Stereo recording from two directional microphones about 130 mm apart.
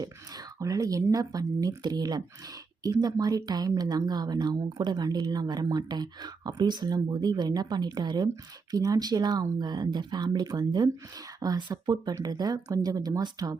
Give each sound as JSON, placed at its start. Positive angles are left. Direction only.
{"t": 0.6, "sound": "speech", "side_deg": -25}